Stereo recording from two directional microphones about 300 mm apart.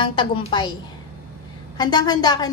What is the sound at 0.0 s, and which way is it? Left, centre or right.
Speech, centre.